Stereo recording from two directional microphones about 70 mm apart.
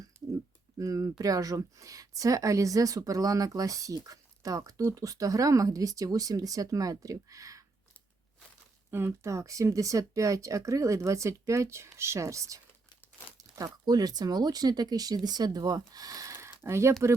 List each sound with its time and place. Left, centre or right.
0.1 s a sound: centre
0.8 s a woman's voice: right
8.9 s speech: right
13.8 s speech: right